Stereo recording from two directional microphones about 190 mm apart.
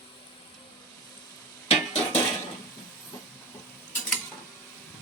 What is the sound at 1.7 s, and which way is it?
Stir, 35° left (ahead or behind).